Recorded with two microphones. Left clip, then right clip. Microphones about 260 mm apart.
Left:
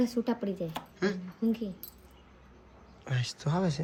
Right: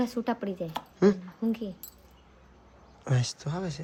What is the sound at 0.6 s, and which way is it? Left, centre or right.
Speech, right.